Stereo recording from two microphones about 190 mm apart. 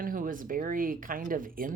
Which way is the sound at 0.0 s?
45° right (ahead or behind).